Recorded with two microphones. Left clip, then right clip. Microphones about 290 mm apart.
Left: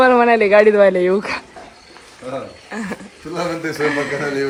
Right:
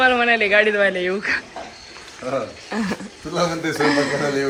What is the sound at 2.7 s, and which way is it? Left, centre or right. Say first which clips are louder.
Speech: right 2 dB; centre.